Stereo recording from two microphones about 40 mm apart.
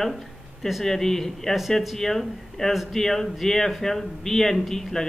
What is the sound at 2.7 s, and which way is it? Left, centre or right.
Speech, centre.